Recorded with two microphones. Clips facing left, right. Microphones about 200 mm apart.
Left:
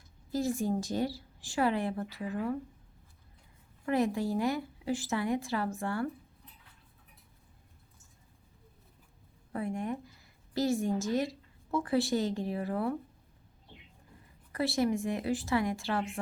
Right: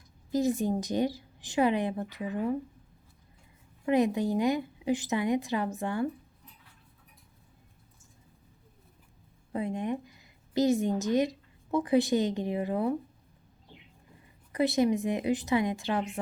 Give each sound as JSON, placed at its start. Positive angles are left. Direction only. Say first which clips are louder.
{"t": 0.3, "sound": "a woman's voice", "louder": "right 4 dB", "side_deg": -20}
{"t": 3.8, "sound": "a woman's voice", "louder": "right 4 dB", "side_deg": -20}
{"t": 9.5, "sound": "a woman's voice", "louder": "right 3 dB", "side_deg": -20}
{"t": 14.5, "sound": "a woman's voice", "louder": "right 4 dB", "side_deg": -20}